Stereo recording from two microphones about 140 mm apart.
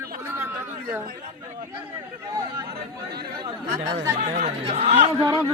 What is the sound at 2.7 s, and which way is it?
Speech, 90° right.